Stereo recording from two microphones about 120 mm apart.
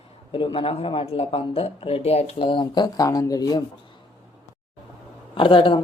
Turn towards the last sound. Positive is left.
turn(degrees=45)  # may be behind; listen again after turning